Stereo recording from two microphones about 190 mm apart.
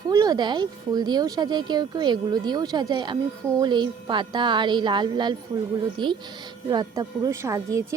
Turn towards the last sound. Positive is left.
turn(degrees=-15)  # may be behind; listen again after turning